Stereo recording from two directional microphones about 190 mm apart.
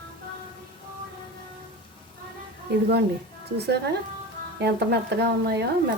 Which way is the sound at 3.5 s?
60° right (ahead or behind).